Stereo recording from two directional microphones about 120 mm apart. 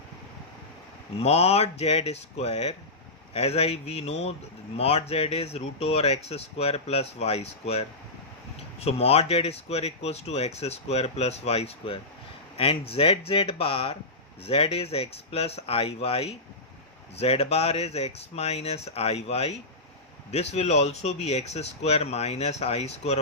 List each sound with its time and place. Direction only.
1.2 s speech: 60° left (ahead or behind)